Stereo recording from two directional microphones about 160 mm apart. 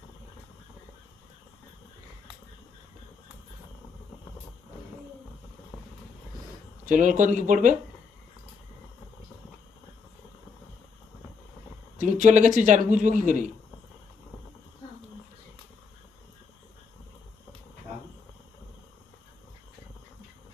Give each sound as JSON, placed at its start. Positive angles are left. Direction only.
{"t": 6.8, "sound": "speech", "side_deg": -55}
{"t": 11.9, "sound": "speech", "side_deg": -50}